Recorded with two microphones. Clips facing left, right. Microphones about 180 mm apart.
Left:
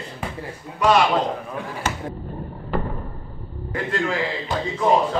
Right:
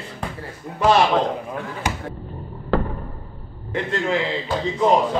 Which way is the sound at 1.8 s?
15° right (ahead or behind).